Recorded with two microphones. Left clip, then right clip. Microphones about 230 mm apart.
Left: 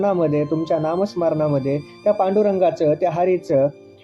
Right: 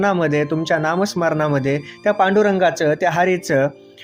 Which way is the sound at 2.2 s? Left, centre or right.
Right.